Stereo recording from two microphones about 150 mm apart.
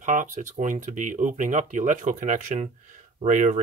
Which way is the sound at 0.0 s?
60° right (ahead or behind).